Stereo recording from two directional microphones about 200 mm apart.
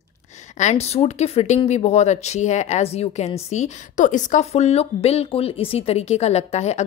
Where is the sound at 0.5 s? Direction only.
35° left (ahead or behind).